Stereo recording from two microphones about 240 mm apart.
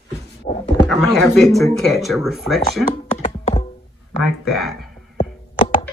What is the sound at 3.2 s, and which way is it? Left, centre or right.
Music, left.